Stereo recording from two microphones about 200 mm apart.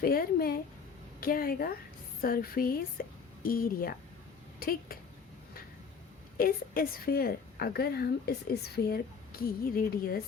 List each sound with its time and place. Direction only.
0.0 s a sound: 50° left (ahead or behind)
1.2 s a woman's voice: 45° left (ahead or behind)
6.3 s a woman's voice: 45° left (ahead or behind)